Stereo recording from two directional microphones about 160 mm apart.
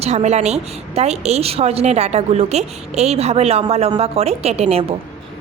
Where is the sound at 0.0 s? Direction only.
45° right (ahead or behind).